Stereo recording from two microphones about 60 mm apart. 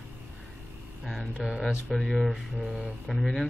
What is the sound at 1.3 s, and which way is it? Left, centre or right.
Speech, centre.